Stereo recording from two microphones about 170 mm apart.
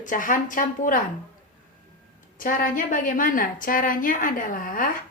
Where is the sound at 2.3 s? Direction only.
55° left (ahead or behind).